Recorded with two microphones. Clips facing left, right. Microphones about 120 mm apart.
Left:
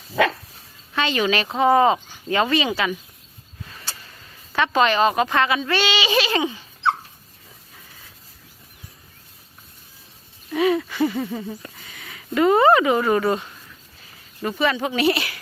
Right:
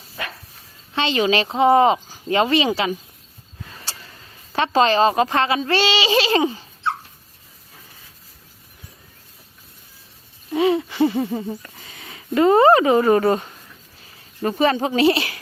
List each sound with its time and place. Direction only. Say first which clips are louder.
0.2 s dog: left 13 dB; 90° left
0.9 s speech: right 2 dB; 25° right (ahead or behind)
4.5 s a woman's voice: right 2 dB; 30° right (ahead or behind)
10.5 s wheeze: right 1 dB; 25° right (ahead or behind)
11.8 s a woman's voice: right 1 dB; 30° right (ahead or behind)